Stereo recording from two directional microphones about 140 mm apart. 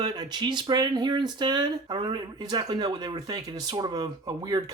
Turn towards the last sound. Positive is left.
turn(degrees=-30)  # may be behind; listen again after turning